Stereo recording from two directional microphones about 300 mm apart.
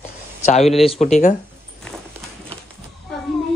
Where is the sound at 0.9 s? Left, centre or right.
Left.